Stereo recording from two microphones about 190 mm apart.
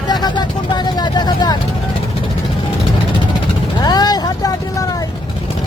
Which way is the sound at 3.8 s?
20° left (ahead or behind).